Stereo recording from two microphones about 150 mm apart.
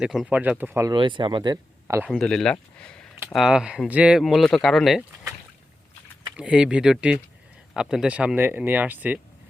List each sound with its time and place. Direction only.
0.0 s speech: 5° right (ahead or behind)
0.9 s speech: 35° right (ahead or behind)
2.0 s speech: 5° left (ahead or behind)
6.3 s speech: 5° right (ahead or behind)